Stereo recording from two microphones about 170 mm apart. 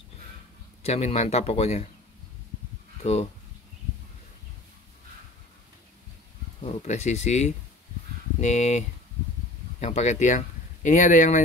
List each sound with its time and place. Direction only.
0.8 s a man's voice: 40° left (ahead or behind)
3.0 s speech: 40° left (ahead or behind)
6.6 s a man's voice: 40° left (ahead or behind)